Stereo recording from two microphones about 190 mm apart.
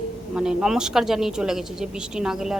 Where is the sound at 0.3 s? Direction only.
5° right (ahead or behind).